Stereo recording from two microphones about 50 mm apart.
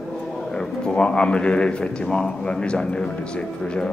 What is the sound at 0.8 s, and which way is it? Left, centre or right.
A man's voice, left.